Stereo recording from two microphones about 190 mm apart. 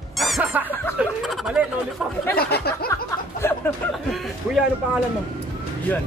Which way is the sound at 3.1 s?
10° left (ahead or behind).